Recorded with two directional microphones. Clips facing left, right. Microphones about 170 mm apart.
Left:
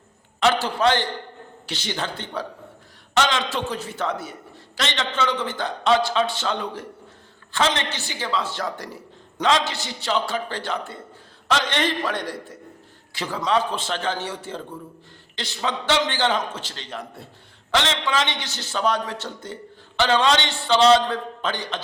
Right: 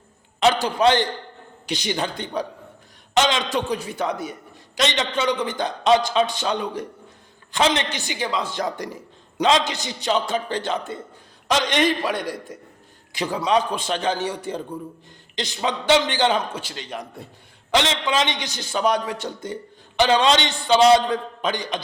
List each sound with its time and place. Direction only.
0.3 s a man's voice: 15° right (ahead or behind)